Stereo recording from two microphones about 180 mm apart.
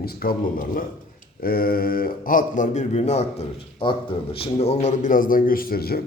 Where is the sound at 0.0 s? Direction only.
55° left (ahead or behind).